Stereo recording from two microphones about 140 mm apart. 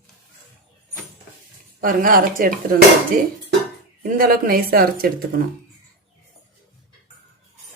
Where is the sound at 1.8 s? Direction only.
90° right.